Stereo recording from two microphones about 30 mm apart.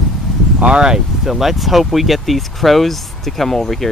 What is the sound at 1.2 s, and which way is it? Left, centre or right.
Speech, centre.